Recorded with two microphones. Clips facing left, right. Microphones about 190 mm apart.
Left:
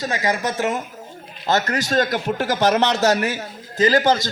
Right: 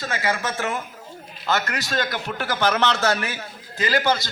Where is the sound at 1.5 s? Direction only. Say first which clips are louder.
Left 5 dB; 40° left (ahead or behind).